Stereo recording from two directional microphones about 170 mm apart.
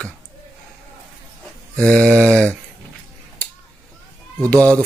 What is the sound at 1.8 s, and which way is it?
Speech, 5° left (ahead or behind).